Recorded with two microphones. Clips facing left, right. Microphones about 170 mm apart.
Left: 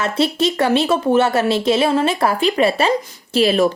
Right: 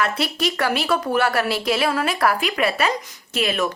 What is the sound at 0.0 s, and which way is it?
A woman's voice, 25° left (ahead or behind).